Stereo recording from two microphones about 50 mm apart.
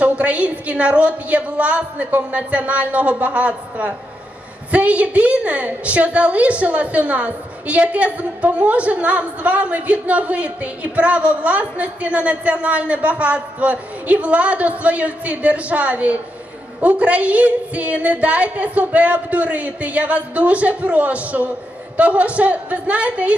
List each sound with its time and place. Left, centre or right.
0.0 s a woman's voice: right